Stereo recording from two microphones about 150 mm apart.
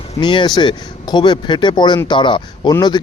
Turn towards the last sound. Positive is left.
turn(degrees=25)  # may be behind; listen again after turning